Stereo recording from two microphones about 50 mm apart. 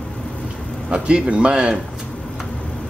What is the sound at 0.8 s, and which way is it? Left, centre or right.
Speech, centre.